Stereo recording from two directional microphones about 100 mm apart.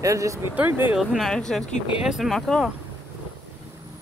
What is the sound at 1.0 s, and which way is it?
Speech, centre (ahead or behind).